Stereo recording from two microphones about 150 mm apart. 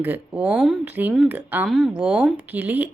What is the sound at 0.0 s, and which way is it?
A woman's voice, 10° right (ahead or behind).